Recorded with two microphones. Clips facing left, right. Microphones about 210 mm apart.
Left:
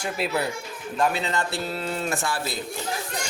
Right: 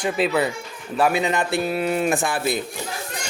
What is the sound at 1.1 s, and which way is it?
Speech, 15° right (ahead or behind).